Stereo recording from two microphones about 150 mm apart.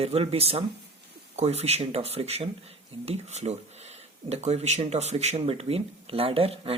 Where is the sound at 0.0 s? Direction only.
40° right (ahead or behind).